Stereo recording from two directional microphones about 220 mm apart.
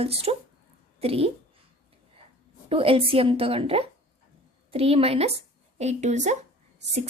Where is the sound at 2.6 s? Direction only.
25° right (ahead or behind).